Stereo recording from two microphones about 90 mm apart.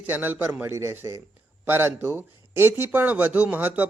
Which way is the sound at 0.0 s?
20° right (ahead or behind).